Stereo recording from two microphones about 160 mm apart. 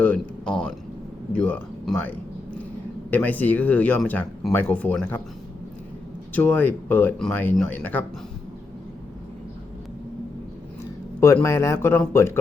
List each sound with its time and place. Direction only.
0.0 s a sound: 10° left (ahead or behind)
1.3 s speech: 10° left (ahead or behind)
6.3 s speech: 10° left (ahead or behind)
11.4 s speech: 20° left (ahead or behind)